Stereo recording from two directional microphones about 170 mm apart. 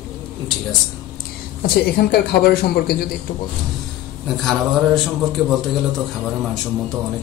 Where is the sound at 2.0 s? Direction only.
65° left (ahead or behind).